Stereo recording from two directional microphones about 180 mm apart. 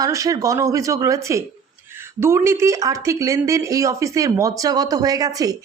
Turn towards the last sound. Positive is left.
turn(degrees=-20)  # may be behind; listen again after turning